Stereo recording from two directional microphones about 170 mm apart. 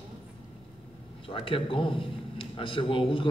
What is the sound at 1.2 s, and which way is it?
A man's voice, 30° left (ahead or behind).